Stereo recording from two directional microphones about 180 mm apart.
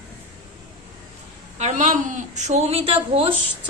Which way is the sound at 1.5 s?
40° right (ahead or behind).